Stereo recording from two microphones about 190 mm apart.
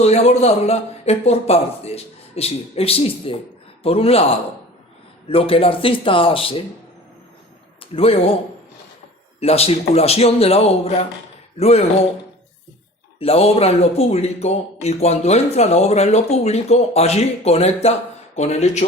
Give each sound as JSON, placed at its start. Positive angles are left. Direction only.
{"t": 0.0, "sound": "speech", "side_deg": 35}
{"t": 5.3, "sound": "speech", "side_deg": 30}
{"t": 7.9, "sound": "speech", "side_deg": 30}
{"t": 9.4, "sound": "speech", "side_deg": 30}
{"t": 13.1, "sound": "speech", "side_deg": 30}